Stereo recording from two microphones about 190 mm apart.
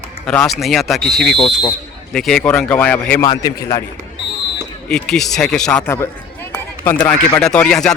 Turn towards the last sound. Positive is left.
turn(degrees=5)  # may be behind; listen again after turning